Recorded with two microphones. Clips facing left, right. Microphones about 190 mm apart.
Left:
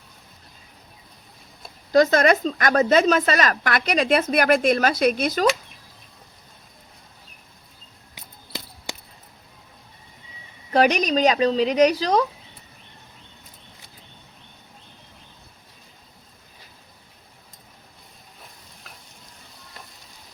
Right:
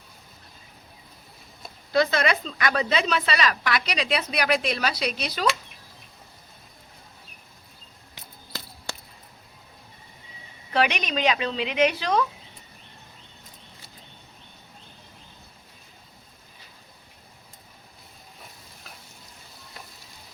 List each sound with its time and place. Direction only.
1.9 s speech: 45° left (ahead or behind)
10.7 s speech: 40° left (ahead or behind)